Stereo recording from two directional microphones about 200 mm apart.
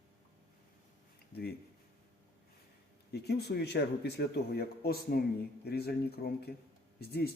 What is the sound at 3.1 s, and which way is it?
Speech, 55° left (ahead or behind).